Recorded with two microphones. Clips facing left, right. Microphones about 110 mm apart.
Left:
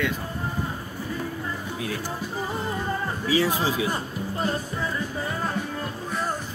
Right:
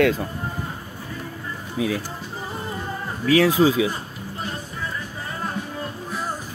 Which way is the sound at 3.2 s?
90° right.